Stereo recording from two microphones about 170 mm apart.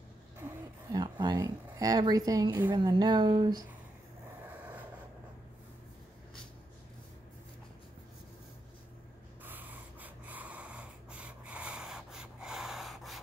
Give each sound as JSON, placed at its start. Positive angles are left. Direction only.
{"t": 0.9, "sound": "speech", "side_deg": -25}
{"t": 4.5, "sound": "a sound", "side_deg": -10}
{"t": 9.4, "sound": "snort", "side_deg": -10}